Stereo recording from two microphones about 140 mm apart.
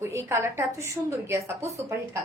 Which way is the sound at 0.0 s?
15° right (ahead or behind).